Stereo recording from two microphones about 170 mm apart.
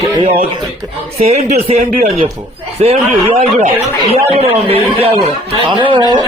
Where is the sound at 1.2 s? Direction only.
40° right (ahead or behind).